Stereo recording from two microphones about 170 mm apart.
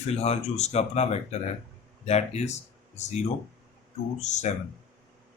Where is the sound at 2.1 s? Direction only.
40° left (ahead or behind).